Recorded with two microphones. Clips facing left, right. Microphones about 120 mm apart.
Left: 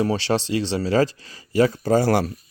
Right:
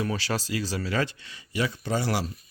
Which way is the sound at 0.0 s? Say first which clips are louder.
Left 8 dB; 30° left (ahead or behind).